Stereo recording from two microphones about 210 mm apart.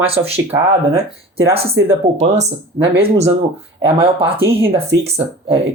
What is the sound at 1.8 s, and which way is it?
Speech, 60° right (ahead or behind).